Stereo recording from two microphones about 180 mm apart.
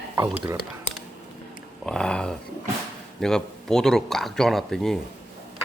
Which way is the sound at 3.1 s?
5° left (ahead or behind).